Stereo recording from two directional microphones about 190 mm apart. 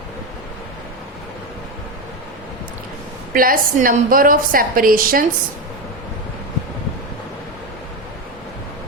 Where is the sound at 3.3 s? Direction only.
50° right (ahead or behind).